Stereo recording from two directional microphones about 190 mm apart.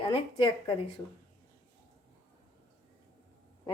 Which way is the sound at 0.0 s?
25° left (ahead or behind).